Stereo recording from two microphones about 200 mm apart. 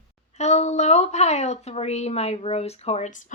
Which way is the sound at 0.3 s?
35° left (ahead or behind).